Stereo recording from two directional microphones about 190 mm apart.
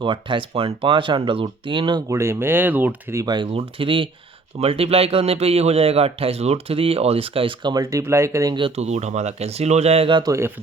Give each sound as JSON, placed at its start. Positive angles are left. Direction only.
{"t": 0.0, "sound": "a man's voice", "side_deg": -25}